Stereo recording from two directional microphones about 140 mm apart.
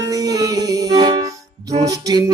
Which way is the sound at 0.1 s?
25° right (ahead or behind).